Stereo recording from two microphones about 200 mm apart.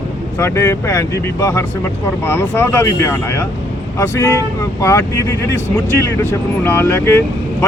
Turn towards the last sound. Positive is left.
turn(degrees=10)  # may be behind; listen again after turning